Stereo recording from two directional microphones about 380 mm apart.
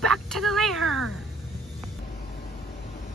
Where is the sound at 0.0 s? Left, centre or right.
Centre.